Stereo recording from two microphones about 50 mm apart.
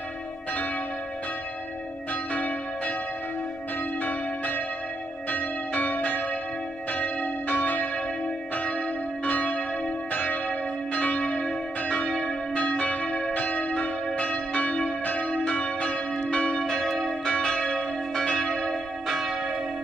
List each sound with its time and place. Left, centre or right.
2.3 s change ringing: left
4.0 s change ringing: left
6.9 s church bell: left
12.1 s change ringing: left
19.0 s church bell: centre